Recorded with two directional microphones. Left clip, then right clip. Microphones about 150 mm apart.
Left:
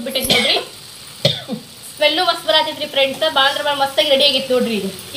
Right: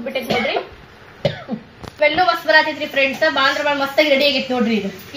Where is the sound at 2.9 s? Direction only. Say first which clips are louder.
Left 1 dB; 20° left (ahead or behind).